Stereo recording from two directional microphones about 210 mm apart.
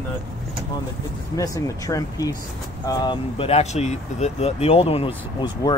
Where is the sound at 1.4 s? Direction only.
15° left (ahead or behind).